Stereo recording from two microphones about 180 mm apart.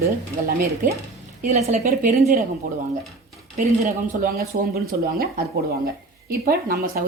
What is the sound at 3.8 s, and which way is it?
A woman's voice, 55° right (ahead or behind).